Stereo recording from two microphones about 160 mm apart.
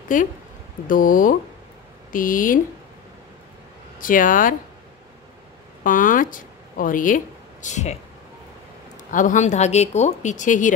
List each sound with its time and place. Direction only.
0.1 s speech: 55° left (ahead or behind)
4.0 s speech: 60° left (ahead or behind)
5.9 s speech: 55° left (ahead or behind)
9.1 s speech: 50° left (ahead or behind)